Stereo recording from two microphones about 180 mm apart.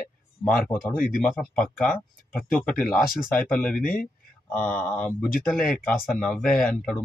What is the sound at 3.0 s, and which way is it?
Speech, 50° left (ahead or behind).